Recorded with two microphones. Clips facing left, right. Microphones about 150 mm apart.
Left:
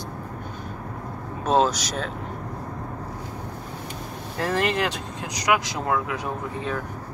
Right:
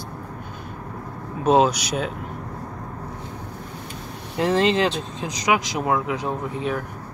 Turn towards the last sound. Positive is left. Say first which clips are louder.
# right 3 dB
turn(degrees=-20)  # may be behind; listen again after turning